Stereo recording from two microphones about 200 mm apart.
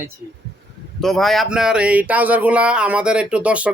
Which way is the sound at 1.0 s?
Centre (ahead or behind).